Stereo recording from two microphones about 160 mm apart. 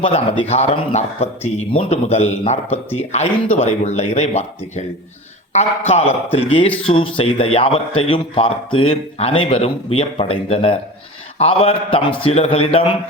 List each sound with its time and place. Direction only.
0.0 s speech: 35° left (ahead or behind)
6.8 s speech: 30° left (ahead or behind)